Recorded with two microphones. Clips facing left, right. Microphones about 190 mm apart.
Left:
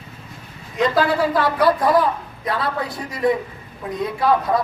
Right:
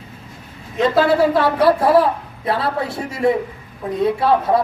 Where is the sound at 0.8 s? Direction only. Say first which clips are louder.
Right 4 dB; 25° right (ahead or behind).